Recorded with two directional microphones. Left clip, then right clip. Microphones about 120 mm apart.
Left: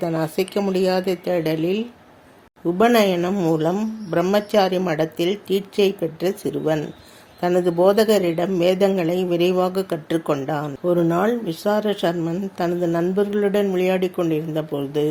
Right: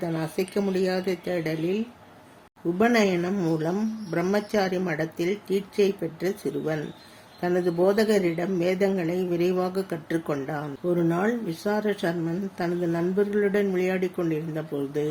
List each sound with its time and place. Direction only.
0.0 s speech: 30° left (ahead or behind)